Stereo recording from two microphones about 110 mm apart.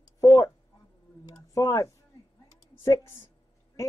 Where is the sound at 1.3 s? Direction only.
30° left (ahead or behind).